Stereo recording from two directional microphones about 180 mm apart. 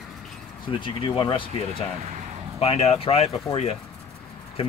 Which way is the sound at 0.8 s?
30° left (ahead or behind).